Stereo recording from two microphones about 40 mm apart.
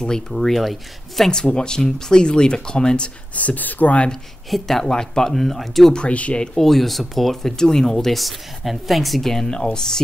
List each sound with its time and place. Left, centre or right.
0.3 s speech: centre
1.3 s speech: left
3.3 s speech: left
4.5 s speech: centre
5.9 s speech: left
6.6 s speech: centre
7.5 s speech: centre
8.2 s speech: centre
9.5 s speech: centre